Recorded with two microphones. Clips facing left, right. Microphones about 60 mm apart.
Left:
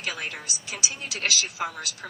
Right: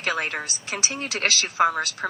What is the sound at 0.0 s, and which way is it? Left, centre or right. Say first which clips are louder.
A woman's voice: right 7 dB; right.